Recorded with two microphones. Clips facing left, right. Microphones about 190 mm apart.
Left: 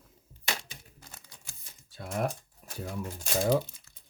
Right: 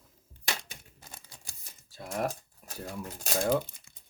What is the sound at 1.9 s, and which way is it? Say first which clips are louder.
Typewriter: left 1 dB; centre (ahead or behind).